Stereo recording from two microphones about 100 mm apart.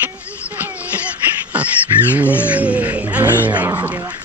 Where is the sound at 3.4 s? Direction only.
15° right (ahead or behind).